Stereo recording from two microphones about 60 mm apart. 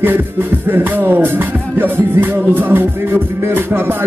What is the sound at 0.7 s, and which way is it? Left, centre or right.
Music, right.